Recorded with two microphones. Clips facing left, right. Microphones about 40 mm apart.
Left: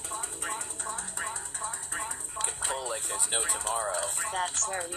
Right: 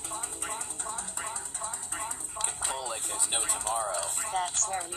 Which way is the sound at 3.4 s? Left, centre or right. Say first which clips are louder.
Right 1 dB; left.